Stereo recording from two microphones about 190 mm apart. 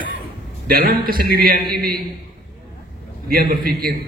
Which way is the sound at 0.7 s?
50° right (ahead or behind).